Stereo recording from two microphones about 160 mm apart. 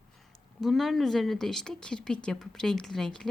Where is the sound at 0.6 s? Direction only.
Centre (ahead or behind).